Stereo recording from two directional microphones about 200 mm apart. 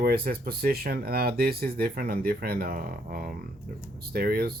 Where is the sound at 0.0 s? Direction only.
50° right (ahead or behind).